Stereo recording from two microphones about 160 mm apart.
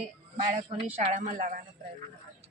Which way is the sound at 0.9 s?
50° right (ahead or behind).